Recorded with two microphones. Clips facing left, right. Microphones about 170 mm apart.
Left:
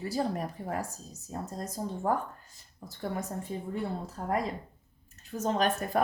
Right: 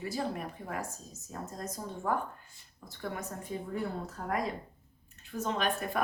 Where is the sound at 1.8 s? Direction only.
35° left (ahead or behind).